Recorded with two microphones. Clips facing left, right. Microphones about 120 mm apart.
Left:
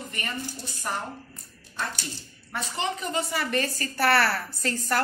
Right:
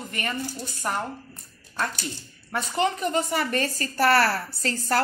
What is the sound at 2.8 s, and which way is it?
A woman's voice, 45° right (ahead or behind).